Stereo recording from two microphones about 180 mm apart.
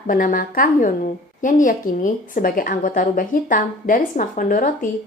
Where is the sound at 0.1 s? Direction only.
50° left (ahead or behind).